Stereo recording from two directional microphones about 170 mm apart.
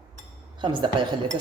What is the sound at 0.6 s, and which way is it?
Speech, 25° right (ahead or behind).